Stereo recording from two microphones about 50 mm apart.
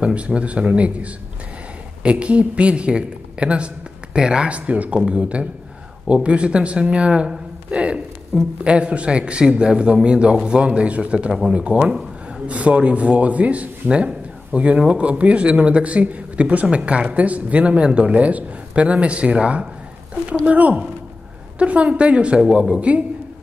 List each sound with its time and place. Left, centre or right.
0.0 s speech: right
8.3 s speech: centre
8.6 s speech: right
22.8 s speech: right